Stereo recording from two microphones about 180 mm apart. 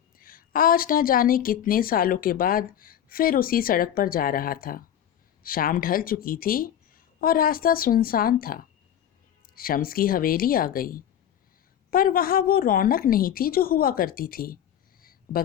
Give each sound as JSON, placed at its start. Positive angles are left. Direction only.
{"t": 0.2, "sound": "a woman's voice", "side_deg": 50}